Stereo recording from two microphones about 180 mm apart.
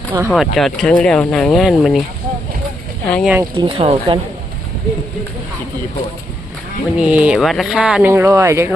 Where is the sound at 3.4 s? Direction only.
25° right (ahead or behind).